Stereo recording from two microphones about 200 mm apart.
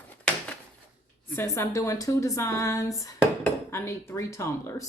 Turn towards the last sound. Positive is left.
turn(degrees=15)  # may be behind; listen again after turning